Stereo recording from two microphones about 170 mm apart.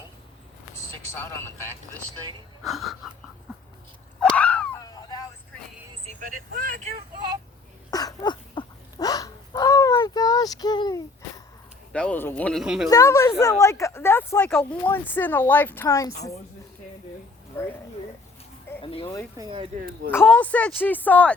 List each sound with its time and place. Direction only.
2.6 s a man's voice: centre (ahead or behind)
4.2 s a sound: 10° left (ahead or behind)
4.9 s vehicle: 20° left (ahead or behind)
6.1 s speech: 50° right (ahead or behind)
7.9 s a sound: 20° left (ahead or behind)
11.9 s a man's voice: 5° left (ahead or behind)
12.6 s a man's voice: 5° right (ahead or behind)
12.9 s speech: 15° left (ahead or behind)
17.5 s a sound: 15° left (ahead or behind)
18.8 s a sound: 30° left (ahead or behind)
19.4 s speech: 30° right (ahead or behind)
20.2 s speech: 10° left (ahead or behind)